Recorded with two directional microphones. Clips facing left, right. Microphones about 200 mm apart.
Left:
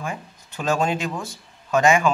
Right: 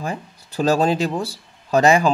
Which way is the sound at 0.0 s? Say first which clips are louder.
Right 3 dB; 35° right (ahead or behind).